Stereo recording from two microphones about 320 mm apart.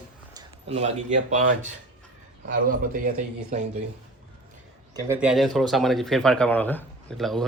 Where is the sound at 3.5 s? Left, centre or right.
Right.